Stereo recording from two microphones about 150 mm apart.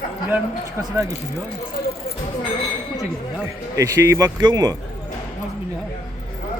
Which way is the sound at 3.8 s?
20° right (ahead or behind).